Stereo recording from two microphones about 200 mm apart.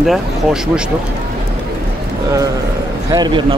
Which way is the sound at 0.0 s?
Centre (ahead or behind).